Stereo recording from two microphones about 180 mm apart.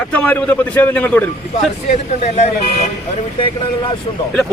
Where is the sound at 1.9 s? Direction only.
35° left (ahead or behind).